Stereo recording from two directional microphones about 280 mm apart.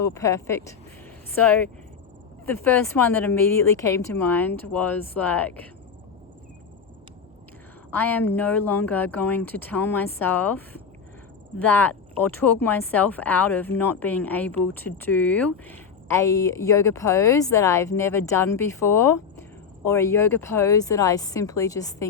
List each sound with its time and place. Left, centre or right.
0.0 s speech: centre
7.9 s speech: centre